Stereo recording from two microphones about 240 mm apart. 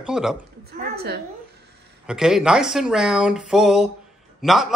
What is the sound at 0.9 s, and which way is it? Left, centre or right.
Speech, right.